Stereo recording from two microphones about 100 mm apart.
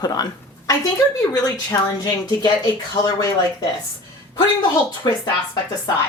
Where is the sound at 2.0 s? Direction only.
40° left (ahead or behind).